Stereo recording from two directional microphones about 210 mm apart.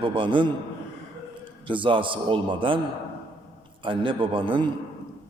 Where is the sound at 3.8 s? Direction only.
25° right (ahead or behind).